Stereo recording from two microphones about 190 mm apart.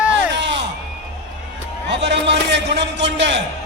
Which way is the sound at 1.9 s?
65° right (ahead or behind).